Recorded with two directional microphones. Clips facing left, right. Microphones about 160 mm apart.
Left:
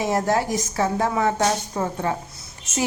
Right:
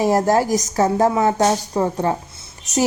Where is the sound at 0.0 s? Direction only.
40° right (ahead or behind).